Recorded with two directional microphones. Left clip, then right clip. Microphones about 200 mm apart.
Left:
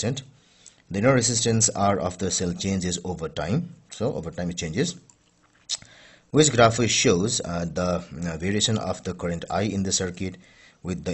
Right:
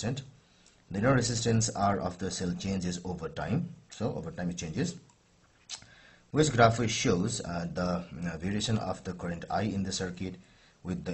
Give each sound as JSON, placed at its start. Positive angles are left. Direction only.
{"t": 0.9, "sound": "speech", "side_deg": 35}
{"t": 6.3, "sound": "speech", "side_deg": 40}